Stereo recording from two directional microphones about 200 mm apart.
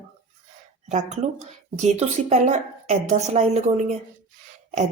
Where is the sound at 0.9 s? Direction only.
35° right (ahead or behind).